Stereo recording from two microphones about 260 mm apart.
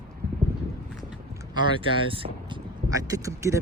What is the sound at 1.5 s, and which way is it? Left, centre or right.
Speech, centre.